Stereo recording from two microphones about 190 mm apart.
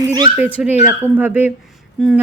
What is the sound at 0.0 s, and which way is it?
Dog, 20° right (ahead or behind).